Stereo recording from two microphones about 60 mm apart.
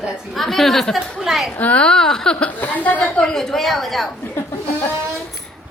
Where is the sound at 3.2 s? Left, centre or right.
Centre.